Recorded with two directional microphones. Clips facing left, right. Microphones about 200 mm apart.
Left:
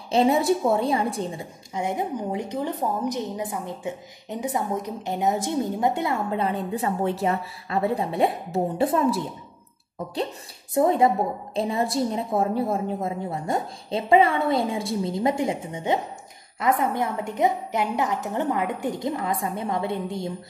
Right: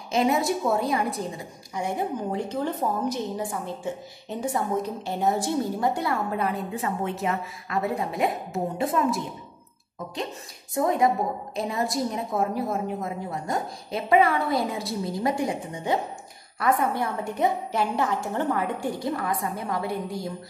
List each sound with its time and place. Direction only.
0.1 s a woman's voice: 30° left (ahead or behind)
10.7 s a woman's voice: 30° left (ahead or behind)